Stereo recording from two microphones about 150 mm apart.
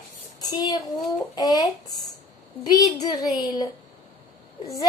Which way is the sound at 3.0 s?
25° left (ahead or behind).